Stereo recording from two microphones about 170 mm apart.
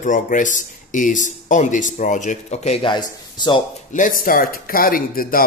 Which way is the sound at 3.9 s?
50° left (ahead or behind).